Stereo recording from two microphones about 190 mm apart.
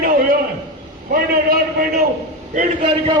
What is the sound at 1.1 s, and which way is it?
Speech, 50° right (ahead or behind).